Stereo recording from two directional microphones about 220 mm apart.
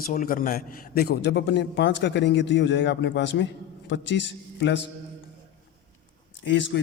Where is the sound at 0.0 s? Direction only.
40° left (ahead or behind).